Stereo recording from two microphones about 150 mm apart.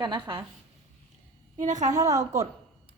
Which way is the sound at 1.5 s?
55° right (ahead or behind).